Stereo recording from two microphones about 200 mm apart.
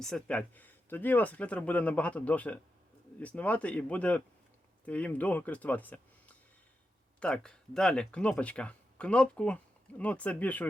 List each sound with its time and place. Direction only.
0.0 s speech: 5° left (ahead or behind)